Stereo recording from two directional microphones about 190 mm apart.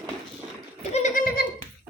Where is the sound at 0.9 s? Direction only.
40° left (ahead or behind).